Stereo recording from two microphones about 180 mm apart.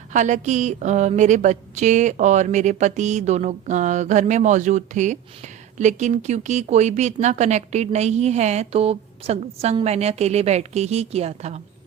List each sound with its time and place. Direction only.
0.1 s a woman's voice: 40° right (ahead or behind)